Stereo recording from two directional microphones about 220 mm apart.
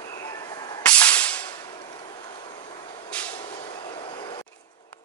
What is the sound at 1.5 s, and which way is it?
Vehicle, 20° left (ahead or behind).